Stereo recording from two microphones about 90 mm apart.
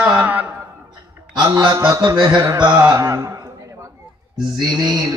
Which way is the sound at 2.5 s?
55° right (ahead or behind).